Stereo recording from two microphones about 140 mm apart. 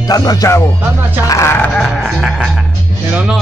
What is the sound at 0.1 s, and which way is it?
Music, 25° left (ahead or behind).